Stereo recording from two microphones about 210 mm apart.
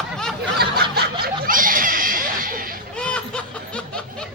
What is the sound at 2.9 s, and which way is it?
Snicker, 5° left (ahead or behind).